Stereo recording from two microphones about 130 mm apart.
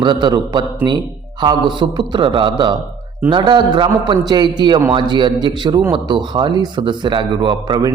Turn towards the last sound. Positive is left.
turn(degrees=-35)  # may be behind; listen again after turning